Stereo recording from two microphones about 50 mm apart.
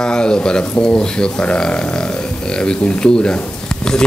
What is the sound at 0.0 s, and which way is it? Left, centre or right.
Speech, centre.